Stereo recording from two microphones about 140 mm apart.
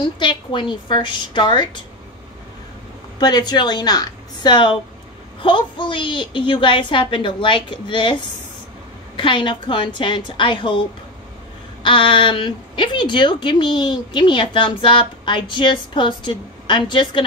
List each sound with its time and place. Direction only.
0.0 s a woman's voice: 35° left (ahead or behind)
3.2 s a woman's voice: 30° left (ahead or behind)